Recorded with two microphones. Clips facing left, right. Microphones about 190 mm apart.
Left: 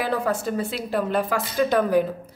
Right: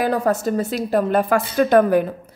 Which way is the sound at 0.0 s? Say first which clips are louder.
Right 5 dB; 45° right (ahead or behind).